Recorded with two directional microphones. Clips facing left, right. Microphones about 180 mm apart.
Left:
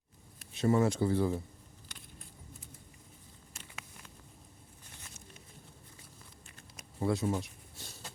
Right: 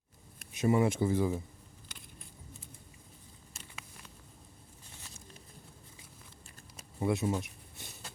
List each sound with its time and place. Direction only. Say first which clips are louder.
0.6 s speech: even; 20° right (ahead or behind)
7.0 s speech: even; 20° right (ahead or behind)